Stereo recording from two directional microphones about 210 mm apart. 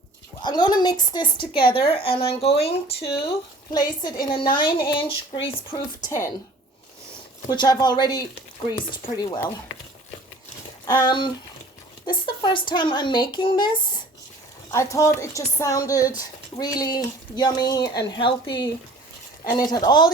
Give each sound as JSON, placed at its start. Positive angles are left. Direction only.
{"t": 0.4, "sound": "a woman's voice", "side_deg": 20}
{"t": 7.5, "sound": "a woman's voice", "side_deg": 20}
{"t": 10.8, "sound": "a woman's voice", "side_deg": 20}